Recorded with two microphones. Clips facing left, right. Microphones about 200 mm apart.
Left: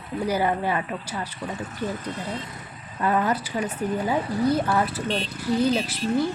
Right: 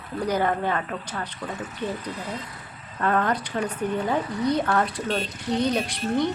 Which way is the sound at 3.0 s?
5° left (ahead or behind).